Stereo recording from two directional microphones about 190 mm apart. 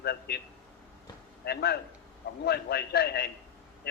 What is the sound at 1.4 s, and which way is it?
A man's voice, 60° left (ahead or behind).